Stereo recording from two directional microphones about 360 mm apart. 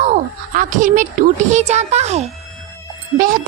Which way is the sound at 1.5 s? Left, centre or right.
Centre.